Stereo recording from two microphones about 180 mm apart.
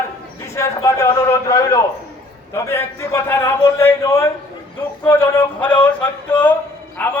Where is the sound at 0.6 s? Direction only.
20° left (ahead or behind).